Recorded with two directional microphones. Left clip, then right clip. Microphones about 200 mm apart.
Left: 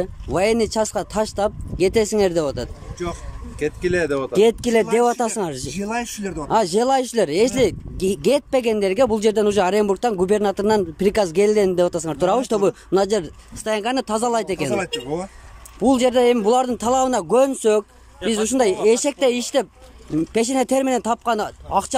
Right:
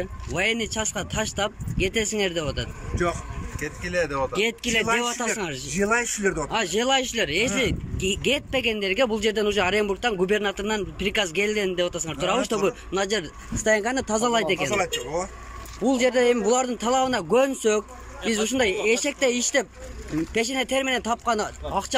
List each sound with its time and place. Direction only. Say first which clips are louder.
0.0 s speech: left 5 dB; 25° left (ahead or behind)
3.5 s speech: left 6 dB; 45° left (ahead or behind)
4.3 s speech: left 8 dB; 30° left (ahead or behind)
5.8 s speech: right 5 dB; 15° left (ahead or behind)
6.5 s speech: left 8 dB; 25° left (ahead or behind)
15.8 s speech: left 5 dB; 15° left (ahead or behind)